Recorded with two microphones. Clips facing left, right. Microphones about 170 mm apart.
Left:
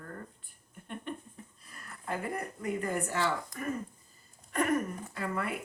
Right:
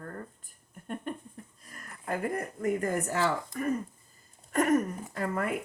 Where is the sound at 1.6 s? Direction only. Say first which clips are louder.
Right 2 dB; 45° right (ahead or behind).